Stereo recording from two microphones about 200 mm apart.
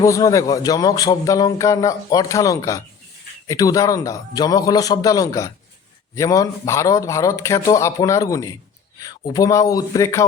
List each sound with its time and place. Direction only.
0.0 s speech: 15° left (ahead or behind)